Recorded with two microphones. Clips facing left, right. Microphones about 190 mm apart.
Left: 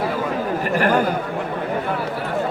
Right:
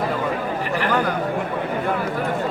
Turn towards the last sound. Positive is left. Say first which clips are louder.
# left 3 dB
turn(degrees=45)  # may be behind; listen again after turning